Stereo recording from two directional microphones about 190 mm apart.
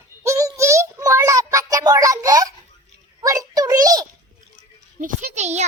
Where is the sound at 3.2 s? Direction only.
20° right (ahead or behind).